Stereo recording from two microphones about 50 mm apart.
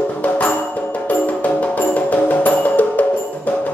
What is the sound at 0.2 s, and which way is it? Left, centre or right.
Music, left.